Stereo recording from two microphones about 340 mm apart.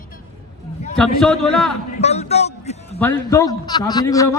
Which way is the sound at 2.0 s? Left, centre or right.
Centre.